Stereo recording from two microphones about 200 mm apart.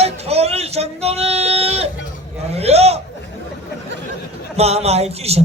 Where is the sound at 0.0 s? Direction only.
30° right (ahead or behind).